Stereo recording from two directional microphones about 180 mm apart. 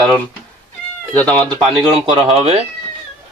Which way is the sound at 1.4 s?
20° right (ahead or behind).